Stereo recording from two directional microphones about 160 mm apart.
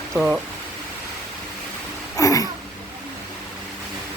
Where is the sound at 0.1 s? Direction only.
Centre (ahead or behind).